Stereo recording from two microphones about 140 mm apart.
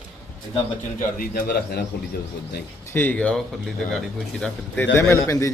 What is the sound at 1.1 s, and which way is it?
Speech, 90° left.